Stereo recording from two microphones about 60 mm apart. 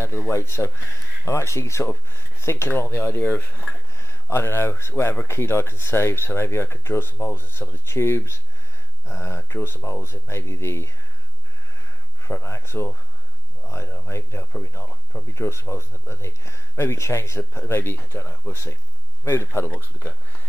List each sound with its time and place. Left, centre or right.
0.3 s speech: left
3.9 s speech: left
12.2 s speech: left
18.5 s speech: left
19.2 s speech: left